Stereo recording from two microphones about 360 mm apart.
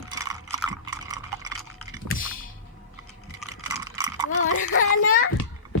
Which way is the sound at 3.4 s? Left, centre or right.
Centre.